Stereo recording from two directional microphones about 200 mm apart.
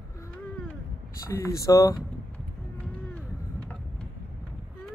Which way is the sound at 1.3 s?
15° left (ahead or behind).